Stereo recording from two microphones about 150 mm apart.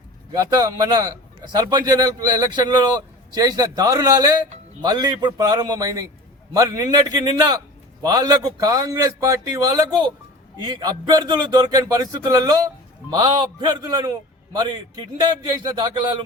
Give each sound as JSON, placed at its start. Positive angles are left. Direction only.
{"t": 0.3, "sound": "speech", "side_deg": -25}